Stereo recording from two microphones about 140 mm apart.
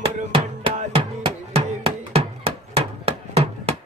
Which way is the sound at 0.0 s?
40° right (ahead or behind).